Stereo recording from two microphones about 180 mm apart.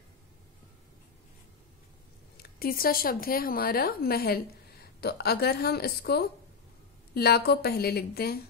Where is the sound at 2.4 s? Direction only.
55° left (ahead or behind).